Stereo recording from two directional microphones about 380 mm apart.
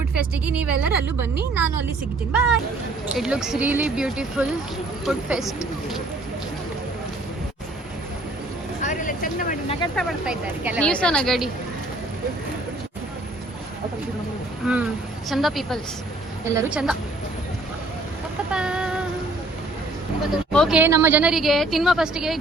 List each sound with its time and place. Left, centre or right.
0.1 s a woman's voice: centre
3.2 s a woman's voice: centre
8.8 s a sound: centre
9.9 s a woman's voice: centre
15.3 s a woman's voice: centre
18.5 s a sound: centre
20.5 s a woman's voice: centre